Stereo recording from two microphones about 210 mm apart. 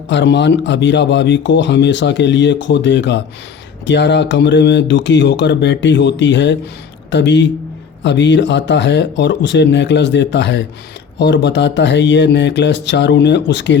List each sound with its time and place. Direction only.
0.1 s speech: 55° left (ahead or behind)